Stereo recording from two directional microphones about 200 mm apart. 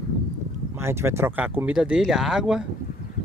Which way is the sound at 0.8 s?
10° right (ahead or behind).